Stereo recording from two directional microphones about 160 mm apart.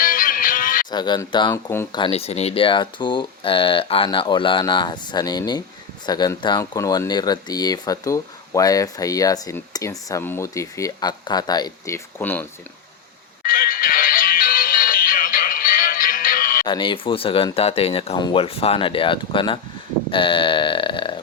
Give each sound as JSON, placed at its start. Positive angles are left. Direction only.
{"t": 0.0, "sound": "music", "side_deg": 60}
{"t": 0.9, "sound": "speech", "side_deg": 25}
{"t": 1.5, "sound": "speech", "side_deg": 15}
{"t": 1.9, "sound": "speech", "side_deg": 35}
{"t": 13.4, "sound": "music", "side_deg": 65}
{"t": 16.6, "sound": "speech", "side_deg": 30}